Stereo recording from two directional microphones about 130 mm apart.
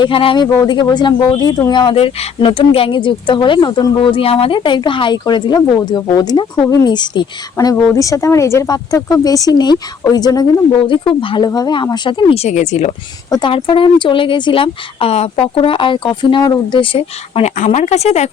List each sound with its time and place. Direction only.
0.0 s speech: 45° left (ahead or behind)
11.4 s speech: 30° left (ahead or behind)
12.4 s speech: 60° left (ahead or behind)
13.5 s speech: 40° left (ahead or behind); by 18.3 s 55° left (ahead or behind)